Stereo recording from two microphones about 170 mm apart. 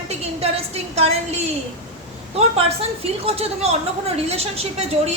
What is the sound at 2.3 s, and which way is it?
A woman's voice, 35° right (ahead or behind).